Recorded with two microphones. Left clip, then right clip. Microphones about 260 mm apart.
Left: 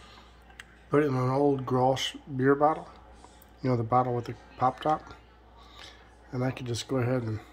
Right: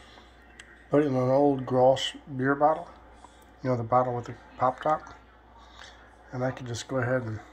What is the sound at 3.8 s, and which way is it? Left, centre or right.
Speech, left.